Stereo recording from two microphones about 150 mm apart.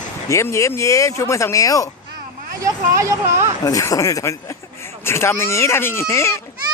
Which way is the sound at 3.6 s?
20° left (ahead or behind).